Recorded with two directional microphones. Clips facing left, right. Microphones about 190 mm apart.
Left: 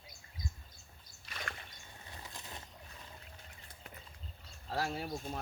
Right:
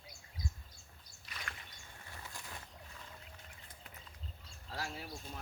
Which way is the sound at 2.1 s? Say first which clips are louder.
Left 1 dB; 20° left (ahead or behind).